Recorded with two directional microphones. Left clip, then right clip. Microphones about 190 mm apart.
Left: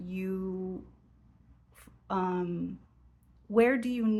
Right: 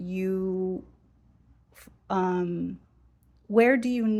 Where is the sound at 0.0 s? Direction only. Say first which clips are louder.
Right 7 dB; 25° right (ahead or behind).